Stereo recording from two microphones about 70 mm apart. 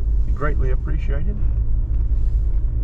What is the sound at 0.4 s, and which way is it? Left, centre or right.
Speech, centre.